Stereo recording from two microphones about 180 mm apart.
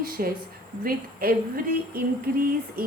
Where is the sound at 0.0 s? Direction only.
55° right (ahead or behind).